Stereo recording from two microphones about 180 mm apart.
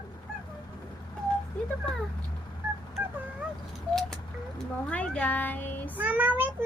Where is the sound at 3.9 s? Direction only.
5° left (ahead or behind).